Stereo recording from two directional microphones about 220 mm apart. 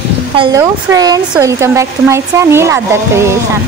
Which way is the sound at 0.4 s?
15° right (ahead or behind).